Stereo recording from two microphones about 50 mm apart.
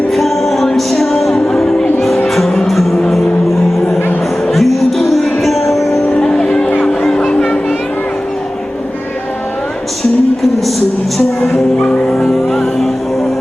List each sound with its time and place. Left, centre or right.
0.1 s music: centre
4.5 s music: centre
6.1 s music: centre
11.8 s music: centre